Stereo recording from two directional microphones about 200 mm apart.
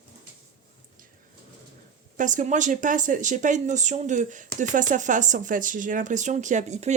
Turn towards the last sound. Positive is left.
turn(degrees=-35)  # may be behind; listen again after turning